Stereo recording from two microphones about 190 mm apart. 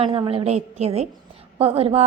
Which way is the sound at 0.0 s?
30° right (ahead or behind).